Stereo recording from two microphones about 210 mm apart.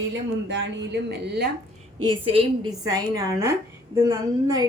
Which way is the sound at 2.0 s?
20° right (ahead or behind).